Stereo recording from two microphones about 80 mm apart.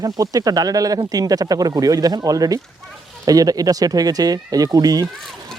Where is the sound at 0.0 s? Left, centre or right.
Right.